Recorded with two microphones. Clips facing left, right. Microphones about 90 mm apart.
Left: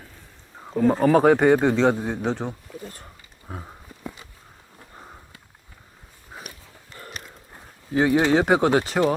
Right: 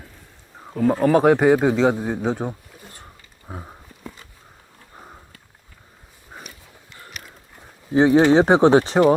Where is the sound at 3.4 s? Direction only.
5° right (ahead or behind).